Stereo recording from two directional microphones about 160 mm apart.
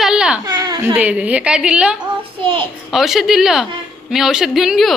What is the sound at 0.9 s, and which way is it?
A woman's voice, 10° right (ahead or behind).